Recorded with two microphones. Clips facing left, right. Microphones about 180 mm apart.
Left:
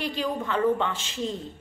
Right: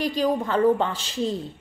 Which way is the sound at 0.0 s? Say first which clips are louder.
Right 6 dB; 40° right (ahead or behind).